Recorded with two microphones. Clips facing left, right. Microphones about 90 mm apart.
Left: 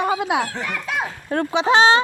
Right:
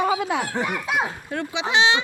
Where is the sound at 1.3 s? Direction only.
50° left (ahead or behind).